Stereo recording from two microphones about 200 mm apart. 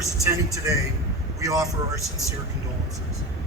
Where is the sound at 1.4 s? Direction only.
15° right (ahead or behind).